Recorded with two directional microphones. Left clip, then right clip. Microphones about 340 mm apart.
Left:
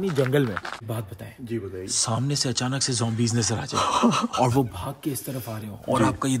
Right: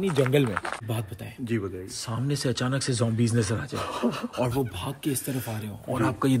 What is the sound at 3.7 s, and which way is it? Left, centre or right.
Speech, left.